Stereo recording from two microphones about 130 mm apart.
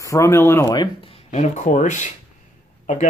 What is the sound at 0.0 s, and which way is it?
Speech, 25° left (ahead or behind).